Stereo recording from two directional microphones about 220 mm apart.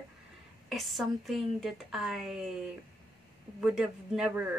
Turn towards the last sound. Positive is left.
turn(degrees=-5)  # may be behind; listen again after turning